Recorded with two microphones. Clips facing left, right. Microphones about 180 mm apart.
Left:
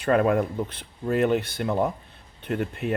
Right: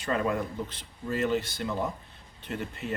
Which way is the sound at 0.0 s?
60° left (ahead or behind).